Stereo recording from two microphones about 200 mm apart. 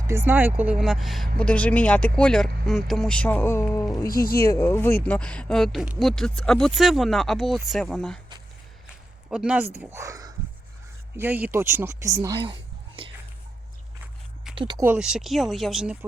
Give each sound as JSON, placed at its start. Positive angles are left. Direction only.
{"t": 0.1, "sound": "speech", "side_deg": -10}
{"t": 4.1, "sound": "speech", "side_deg": 50}
{"t": 4.5, "sound": "speech", "side_deg": 15}
{"t": 9.3, "sound": "speech", "side_deg": -5}
{"t": 9.9, "sound": "speech", "side_deg": -15}
{"t": 13.0, "sound": "whispering", "side_deg": -25}
{"t": 14.5, "sound": "speech", "side_deg": -25}
{"t": 14.8, "sound": "speech", "side_deg": -5}